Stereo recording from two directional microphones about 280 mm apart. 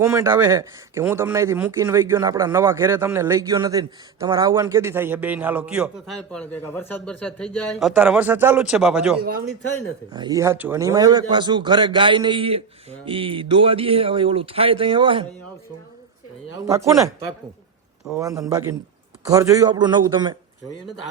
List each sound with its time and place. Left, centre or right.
0.0 s speech: centre
10.1 s speech: centre
16.6 s speech: centre